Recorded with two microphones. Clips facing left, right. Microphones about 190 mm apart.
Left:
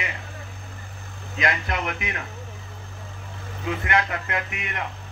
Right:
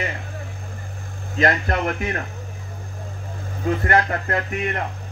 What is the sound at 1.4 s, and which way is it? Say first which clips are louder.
Speech: right 6 dB; 45° right (ahead or behind).